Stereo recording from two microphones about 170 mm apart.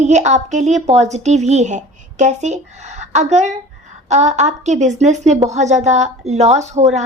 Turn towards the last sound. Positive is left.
turn(degrees=-40)  # may be behind; listen again after turning